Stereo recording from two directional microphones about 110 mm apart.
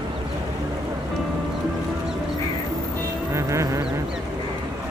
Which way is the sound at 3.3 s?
25° right (ahead or behind).